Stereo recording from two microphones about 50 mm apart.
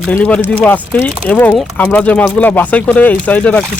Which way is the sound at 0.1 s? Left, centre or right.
Left.